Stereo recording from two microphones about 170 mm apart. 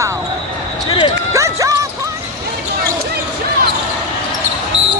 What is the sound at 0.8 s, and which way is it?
Speech, 30° left (ahead or behind).